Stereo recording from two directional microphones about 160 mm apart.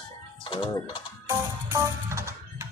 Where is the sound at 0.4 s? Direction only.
35° left (ahead or behind).